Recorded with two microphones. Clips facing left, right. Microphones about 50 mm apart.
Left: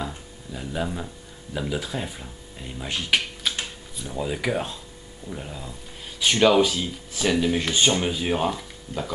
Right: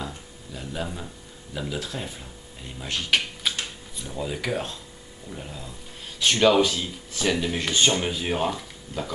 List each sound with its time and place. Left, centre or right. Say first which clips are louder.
0.0 s speech: left 3 dB; centre
3.4 s a sound: left 1 dB; centre
4.0 s speech: left 3 dB; centre